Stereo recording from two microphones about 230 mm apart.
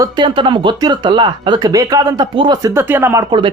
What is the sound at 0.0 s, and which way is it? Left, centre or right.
Speech, right.